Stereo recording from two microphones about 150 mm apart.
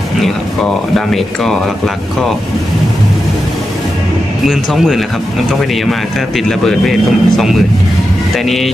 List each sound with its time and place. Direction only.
0.9 s speech: centre (ahead or behind)
4.5 s speech: centre (ahead or behind)